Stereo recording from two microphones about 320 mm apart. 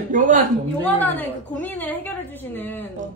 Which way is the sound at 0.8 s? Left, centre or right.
Centre.